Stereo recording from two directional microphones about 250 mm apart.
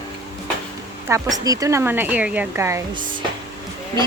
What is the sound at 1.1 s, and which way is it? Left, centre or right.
Speech, centre.